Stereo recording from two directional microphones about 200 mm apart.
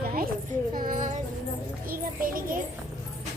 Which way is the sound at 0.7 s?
45° right (ahead or behind).